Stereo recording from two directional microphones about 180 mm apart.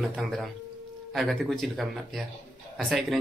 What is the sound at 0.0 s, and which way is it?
Speech, centre (ahead or behind).